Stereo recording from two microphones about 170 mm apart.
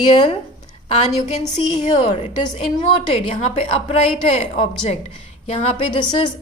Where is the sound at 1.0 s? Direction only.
40° left (ahead or behind).